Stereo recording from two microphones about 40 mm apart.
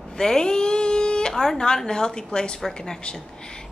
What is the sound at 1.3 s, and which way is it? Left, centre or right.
A woman's voice, centre.